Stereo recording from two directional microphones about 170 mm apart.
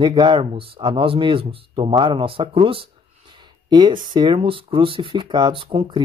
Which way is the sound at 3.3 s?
25° right (ahead or behind).